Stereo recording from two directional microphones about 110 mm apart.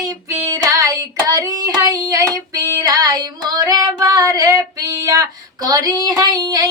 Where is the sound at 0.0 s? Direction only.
30° right (ahead or behind).